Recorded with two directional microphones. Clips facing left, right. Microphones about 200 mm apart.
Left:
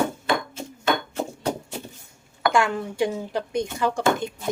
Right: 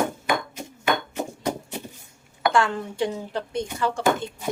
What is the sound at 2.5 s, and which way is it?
Speech, 10° left (ahead or behind).